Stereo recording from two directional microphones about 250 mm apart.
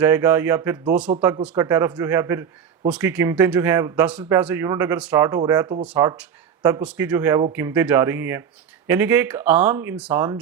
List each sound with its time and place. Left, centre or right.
0.0 s a man's voice: centre